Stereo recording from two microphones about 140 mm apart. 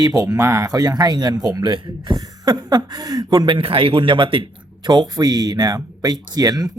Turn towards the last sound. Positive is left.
turn(degrees=-25)  # may be behind; listen again after turning